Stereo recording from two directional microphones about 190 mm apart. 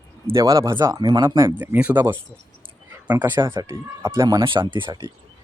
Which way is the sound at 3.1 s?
20° right (ahead or behind).